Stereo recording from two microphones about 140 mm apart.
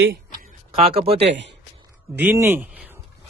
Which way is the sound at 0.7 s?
45° right (ahead or behind).